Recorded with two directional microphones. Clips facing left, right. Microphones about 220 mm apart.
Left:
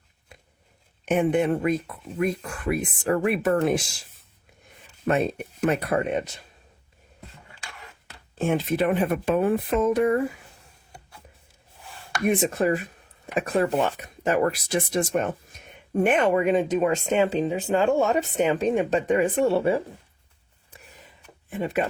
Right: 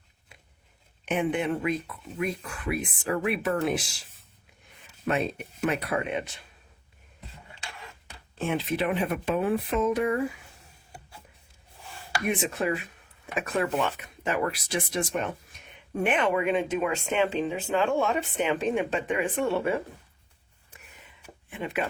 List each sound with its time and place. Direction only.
1.0 s speech: 45° left (ahead or behind)
5.0 s speech: 45° left (ahead or behind)
8.4 s speech: 45° left (ahead or behind)
12.3 s speech: 45° left (ahead or behind)
20.7 s a sound: 35° left (ahead or behind)
21.5 s speech: 40° left (ahead or behind)